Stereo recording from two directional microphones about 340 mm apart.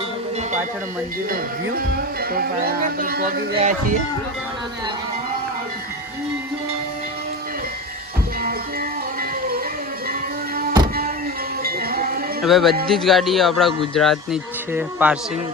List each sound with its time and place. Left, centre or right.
1.3 s speech: right
11.6 s a sound: right
12.4 s a man's voice: centre